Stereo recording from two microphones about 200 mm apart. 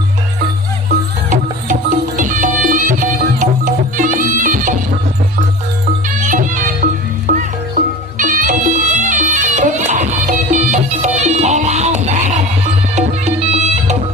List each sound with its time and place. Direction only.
1.3 s music: 40° right (ahead or behind)
6.2 s music: 40° right (ahead or behind)